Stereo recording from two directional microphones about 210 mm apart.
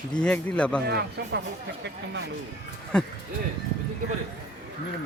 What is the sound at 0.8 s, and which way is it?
Speech, 50° right (ahead or behind).